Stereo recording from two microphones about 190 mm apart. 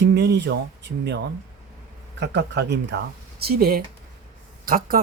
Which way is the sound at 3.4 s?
55° right (ahead or behind).